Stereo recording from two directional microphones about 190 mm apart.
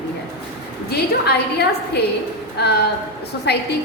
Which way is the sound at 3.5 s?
60° left (ahead or behind).